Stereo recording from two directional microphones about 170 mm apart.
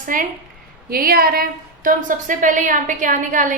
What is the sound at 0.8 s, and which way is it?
A woman's voice, 60° right (ahead or behind).